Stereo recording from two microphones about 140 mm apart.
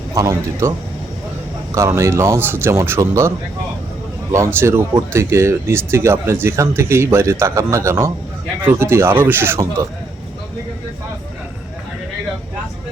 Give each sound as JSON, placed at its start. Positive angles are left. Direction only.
{"t": 0.1, "sound": "speech", "side_deg": -25}
{"t": 1.7, "sound": "speech", "side_deg": -20}